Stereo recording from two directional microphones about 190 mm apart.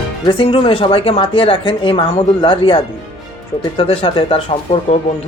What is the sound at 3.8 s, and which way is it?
Speech, 30° left (ahead or behind).